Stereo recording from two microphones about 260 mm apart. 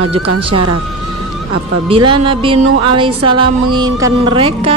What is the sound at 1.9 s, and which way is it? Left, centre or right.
Music, centre.